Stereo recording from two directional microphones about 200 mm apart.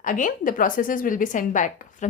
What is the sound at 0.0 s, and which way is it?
A woman's voice, 40° left (ahead or behind).